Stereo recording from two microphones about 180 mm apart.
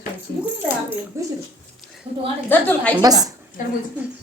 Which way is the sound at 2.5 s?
10° left (ahead or behind).